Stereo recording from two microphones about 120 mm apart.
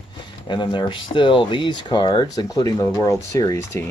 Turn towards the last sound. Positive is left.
turn(degrees=25)  # may be behind; listen again after turning